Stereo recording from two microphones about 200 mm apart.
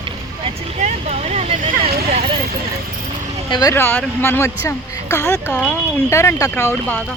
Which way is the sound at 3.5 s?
20° left (ahead or behind).